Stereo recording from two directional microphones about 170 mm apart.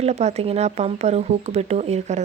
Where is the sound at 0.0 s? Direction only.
40° right (ahead or behind).